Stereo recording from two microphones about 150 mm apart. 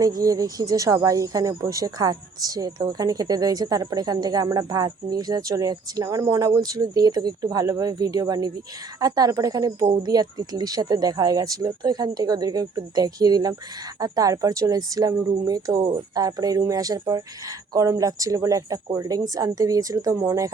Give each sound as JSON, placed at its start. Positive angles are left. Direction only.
{"t": 0.0, "sound": "speech", "side_deg": -25}